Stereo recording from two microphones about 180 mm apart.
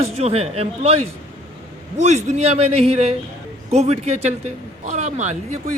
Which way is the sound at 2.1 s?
40° right (ahead or behind).